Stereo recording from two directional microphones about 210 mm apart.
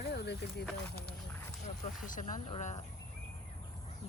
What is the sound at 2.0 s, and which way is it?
Speech, 40° left (ahead or behind).